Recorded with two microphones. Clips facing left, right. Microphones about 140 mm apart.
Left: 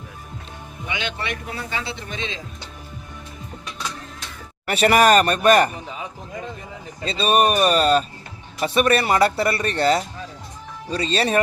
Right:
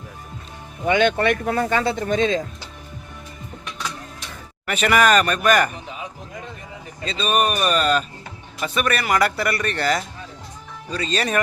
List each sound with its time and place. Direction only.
0.9 s speech: 50° right (ahead or behind)
4.6 s speech: 35° left (ahead or behind)
7.0 s a man's voice: 35° left (ahead or behind)